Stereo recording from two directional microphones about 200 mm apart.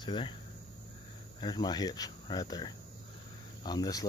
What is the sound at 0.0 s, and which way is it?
Speech, 25° left (ahead or behind).